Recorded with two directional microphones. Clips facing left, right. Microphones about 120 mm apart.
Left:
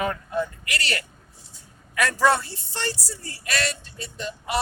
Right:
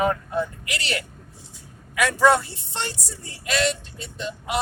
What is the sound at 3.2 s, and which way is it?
Speech, 20° right (ahead or behind).